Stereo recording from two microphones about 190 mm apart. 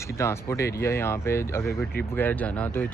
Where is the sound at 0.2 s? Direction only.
15° left (ahead or behind).